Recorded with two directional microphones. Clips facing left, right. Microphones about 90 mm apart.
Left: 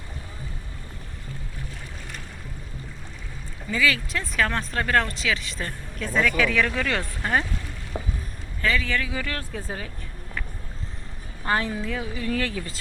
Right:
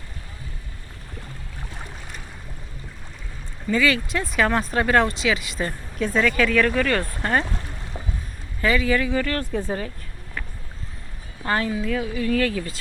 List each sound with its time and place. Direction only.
3.7 s speech: centre (ahead or behind)
4.4 s speech: 15° right (ahead or behind); by 7.0 s centre (ahead or behind)
7.9 s a sound: 20° left (ahead or behind)
8.6 s speech: 10° right (ahead or behind)
9.0 s speech: 5° left (ahead or behind)
11.4 s speech: 20° left (ahead or behind)